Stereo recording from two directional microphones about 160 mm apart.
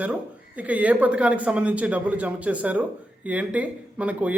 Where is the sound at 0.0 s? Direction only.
10° right (ahead or behind).